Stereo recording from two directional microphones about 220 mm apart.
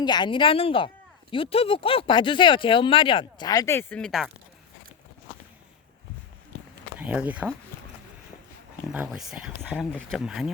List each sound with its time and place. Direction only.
0.0 s speech: 20° left (ahead or behind); by 4.3 s centre (ahead or behind)
7.0 s speech: 5° right (ahead or behind)
8.9 s speech: 5° right (ahead or behind)